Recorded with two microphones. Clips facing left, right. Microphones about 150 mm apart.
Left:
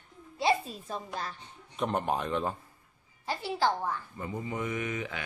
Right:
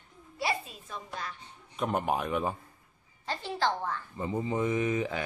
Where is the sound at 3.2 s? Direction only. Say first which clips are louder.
Left 1 dB; 10° left (ahead or behind).